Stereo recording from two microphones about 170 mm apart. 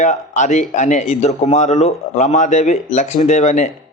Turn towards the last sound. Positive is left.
turn(degrees=45)  # may be behind; listen again after turning